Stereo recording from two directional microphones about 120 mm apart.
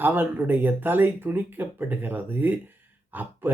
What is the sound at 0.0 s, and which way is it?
Speech, 15° right (ahead or behind).